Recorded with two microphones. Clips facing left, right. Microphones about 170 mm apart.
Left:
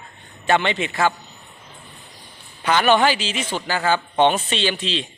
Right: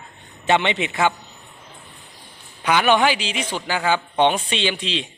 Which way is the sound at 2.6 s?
10° right (ahead or behind).